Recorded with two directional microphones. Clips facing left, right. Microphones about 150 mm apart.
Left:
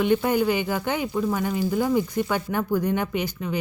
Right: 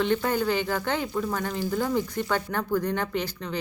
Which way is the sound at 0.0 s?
10° left (ahead or behind).